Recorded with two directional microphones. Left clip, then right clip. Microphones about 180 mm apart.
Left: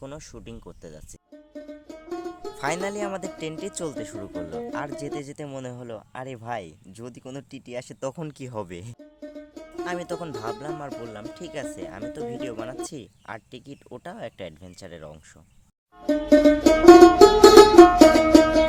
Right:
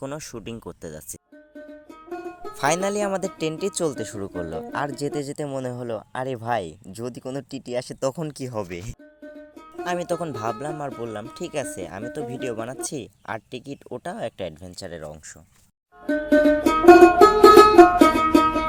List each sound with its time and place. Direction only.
0.0 s speech: 40° right (ahead or behind)
1.9 s music: centre (ahead or behind)
2.6 s speech: 30° right (ahead or behind); by 8.9 s 10° right (ahead or behind)
9.8 s speech: 25° right (ahead or behind)
16.2 s music: centre (ahead or behind)